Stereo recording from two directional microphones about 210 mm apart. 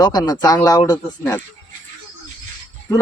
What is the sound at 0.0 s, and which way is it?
Speech, 20° left (ahead or behind).